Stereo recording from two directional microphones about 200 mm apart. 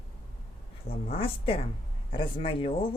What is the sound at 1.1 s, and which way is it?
Speech, 30° left (ahead or behind).